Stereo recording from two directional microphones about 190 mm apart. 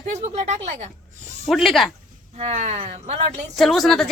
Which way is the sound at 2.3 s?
35° right (ahead or behind).